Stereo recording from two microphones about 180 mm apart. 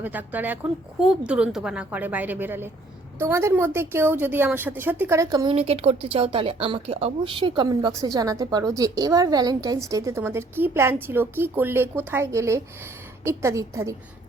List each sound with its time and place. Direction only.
0.0 s a woman's voice: 10° right (ahead or behind)
5.5 s speech: 35° right (ahead or behind); by 13.9 s 15° right (ahead or behind)